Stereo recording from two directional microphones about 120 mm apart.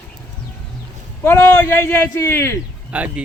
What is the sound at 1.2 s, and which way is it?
Speech, 20° left (ahead or behind).